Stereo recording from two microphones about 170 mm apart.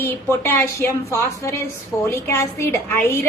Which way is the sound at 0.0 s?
15° left (ahead or behind).